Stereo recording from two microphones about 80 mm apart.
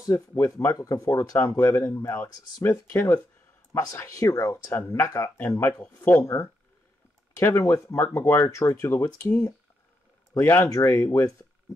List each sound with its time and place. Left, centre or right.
0.1 s speech: left
0.7 s speech: left
1.6 s speech: left
4.7 s speech: left
5.6 s speech: left
5.9 s speech: left
7.5 s speech: left
10.3 s speech: left